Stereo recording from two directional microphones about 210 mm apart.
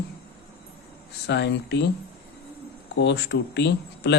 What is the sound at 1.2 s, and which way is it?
Speech, 55° left (ahead or behind).